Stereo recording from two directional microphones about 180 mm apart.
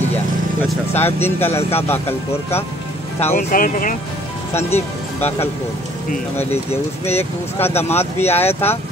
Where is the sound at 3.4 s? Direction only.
50° left (ahead or behind).